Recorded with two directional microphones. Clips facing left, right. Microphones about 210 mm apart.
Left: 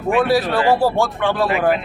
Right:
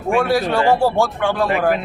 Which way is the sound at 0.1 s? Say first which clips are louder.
Left 1 dB; centre (ahead or behind).